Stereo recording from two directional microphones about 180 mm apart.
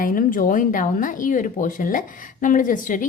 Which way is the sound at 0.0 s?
50° left (ahead or behind).